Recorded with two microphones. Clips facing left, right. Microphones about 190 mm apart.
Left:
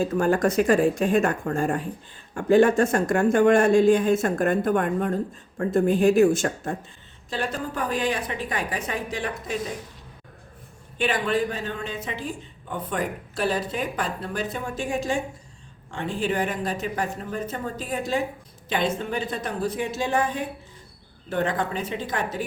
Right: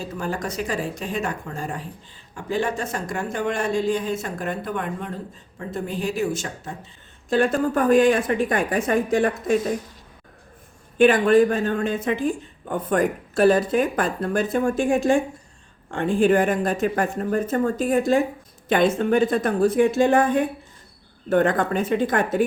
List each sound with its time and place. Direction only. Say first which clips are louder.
0.0 s speech: left 7 dB; 50° left (ahead or behind)
7.3 s a woman's voice: right 9 dB; 50° right (ahead or behind)
10.9 s a woman's voice: right 9 dB; 50° right (ahead or behind)